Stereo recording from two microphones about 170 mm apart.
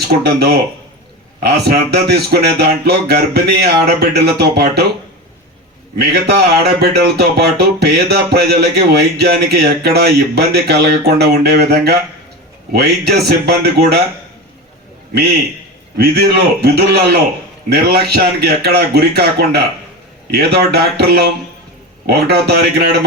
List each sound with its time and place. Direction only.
0.1 s speech: 70° right (ahead or behind)
6.0 s speech: 70° right (ahead or behind)
16.0 s speech: 70° right (ahead or behind)